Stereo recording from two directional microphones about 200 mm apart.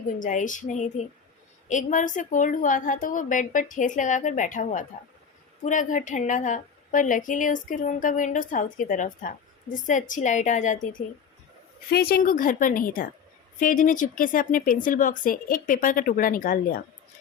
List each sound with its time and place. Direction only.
0.2 s a woman's voice: 40° left (ahead or behind)
11.9 s speech: 50° left (ahead or behind)